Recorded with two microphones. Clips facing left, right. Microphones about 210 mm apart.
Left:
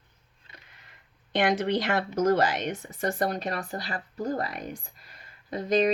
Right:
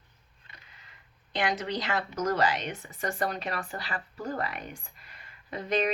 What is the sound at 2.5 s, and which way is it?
Speech, 45° left (ahead or behind).